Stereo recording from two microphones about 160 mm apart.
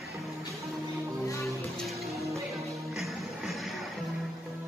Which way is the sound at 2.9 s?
Centre (ahead or behind).